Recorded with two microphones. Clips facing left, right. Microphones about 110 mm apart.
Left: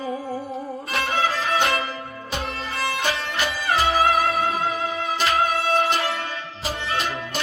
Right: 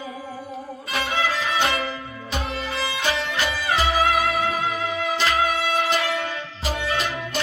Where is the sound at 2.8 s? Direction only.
50° left (ahead or behind).